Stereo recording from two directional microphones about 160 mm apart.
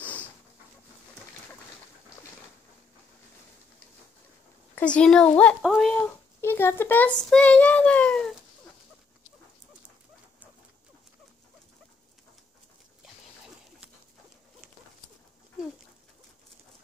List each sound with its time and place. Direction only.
0.0 s dog: 10° left (ahead or behind)
4.7 s a woman's voice: 5° left (ahead or behind)
5.9 s a child's voice: 15° left (ahead or behind)